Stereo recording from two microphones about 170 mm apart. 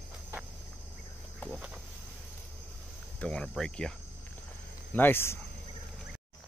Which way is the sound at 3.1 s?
5° left (ahead or behind).